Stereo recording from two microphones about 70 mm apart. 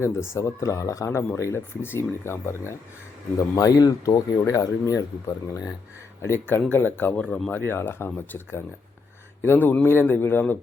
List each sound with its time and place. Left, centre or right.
0.0 s speech: left
1.1 s speech: left
3.3 s speech: left
4.4 s speech: left
6.2 s speech: left